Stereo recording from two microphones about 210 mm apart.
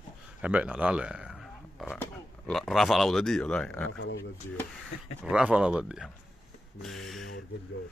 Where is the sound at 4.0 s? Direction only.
60° left (ahead or behind).